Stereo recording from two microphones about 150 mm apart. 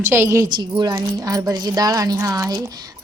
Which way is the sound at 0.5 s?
30° right (ahead or behind).